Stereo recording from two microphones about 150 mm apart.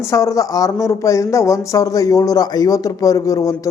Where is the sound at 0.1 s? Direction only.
20° left (ahead or behind).